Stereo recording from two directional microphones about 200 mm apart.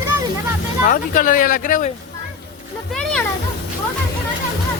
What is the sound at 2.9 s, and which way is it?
Speech, 5° left (ahead or behind).